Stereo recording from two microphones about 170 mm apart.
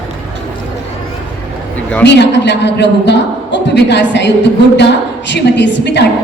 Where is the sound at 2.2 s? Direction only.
90° left.